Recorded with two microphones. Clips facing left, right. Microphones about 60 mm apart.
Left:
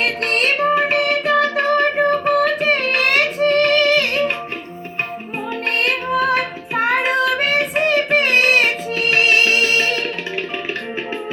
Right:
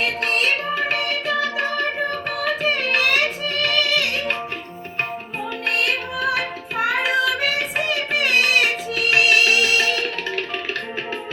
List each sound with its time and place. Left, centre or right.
0.0 s music: left
5.8 s child singing: left